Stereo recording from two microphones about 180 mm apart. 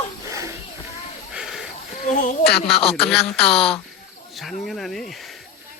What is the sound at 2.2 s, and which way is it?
Speech, 60° left (ahead or behind).